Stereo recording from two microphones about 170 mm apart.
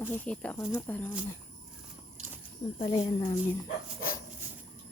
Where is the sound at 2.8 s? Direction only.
30° left (ahead or behind).